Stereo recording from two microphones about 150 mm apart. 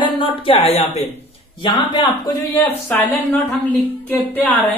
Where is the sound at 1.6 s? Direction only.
30° left (ahead or behind).